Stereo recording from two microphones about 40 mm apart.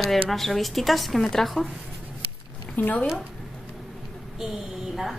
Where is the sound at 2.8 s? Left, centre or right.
Left.